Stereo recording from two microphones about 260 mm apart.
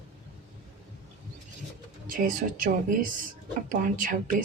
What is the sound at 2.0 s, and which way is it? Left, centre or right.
Speech, right.